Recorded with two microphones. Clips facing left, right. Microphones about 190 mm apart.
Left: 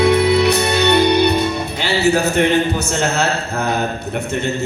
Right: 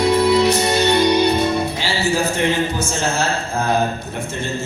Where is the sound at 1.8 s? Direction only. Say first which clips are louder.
Left 4 dB; 65° left (ahead or behind).